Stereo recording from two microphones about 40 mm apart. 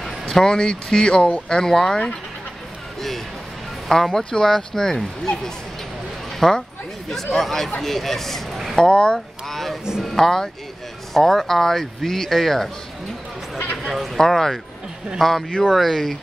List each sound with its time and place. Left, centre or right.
0.0 s music: centre
0.4 s speech: centre
1.6 s speech: centre
3.9 s speech: centre
4.2 s speech: centre
8.7 s speech: left
9.5 s a sound: centre
10.0 s speech: centre
13.8 s speech: centre
14.1 s speech: centre